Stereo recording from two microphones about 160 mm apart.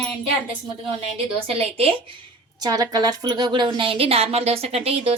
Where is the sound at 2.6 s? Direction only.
25° right (ahead or behind).